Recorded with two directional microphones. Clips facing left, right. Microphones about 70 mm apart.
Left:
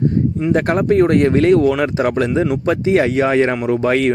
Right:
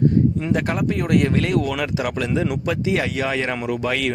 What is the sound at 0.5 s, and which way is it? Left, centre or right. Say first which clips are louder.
Speech: left 7 dB; left.